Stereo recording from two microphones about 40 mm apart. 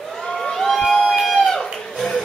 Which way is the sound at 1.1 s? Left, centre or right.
Centre.